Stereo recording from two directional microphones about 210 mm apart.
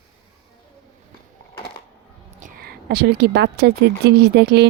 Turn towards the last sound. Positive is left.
turn(degrees=-50)  # may be behind; listen again after turning